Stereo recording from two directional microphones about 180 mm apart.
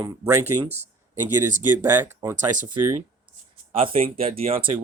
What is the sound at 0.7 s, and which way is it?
Speech, 40° right (ahead or behind).